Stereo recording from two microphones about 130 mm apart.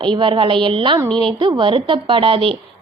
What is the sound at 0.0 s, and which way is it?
A woman's voice, 40° right (ahead or behind).